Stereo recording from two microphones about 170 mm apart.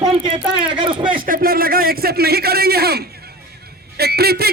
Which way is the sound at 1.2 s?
60° right (ahead or behind).